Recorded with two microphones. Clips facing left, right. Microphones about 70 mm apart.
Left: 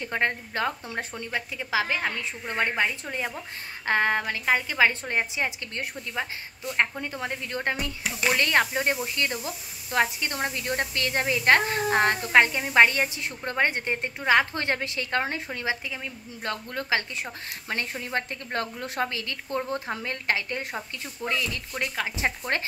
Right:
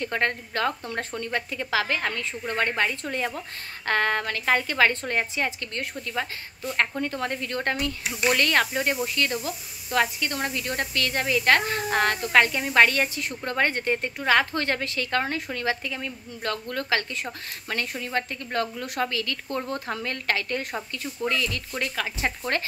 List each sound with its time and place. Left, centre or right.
0.0 s a woman's voice: centre